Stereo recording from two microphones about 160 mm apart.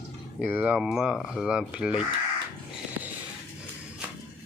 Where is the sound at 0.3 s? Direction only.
10° right (ahead or behind).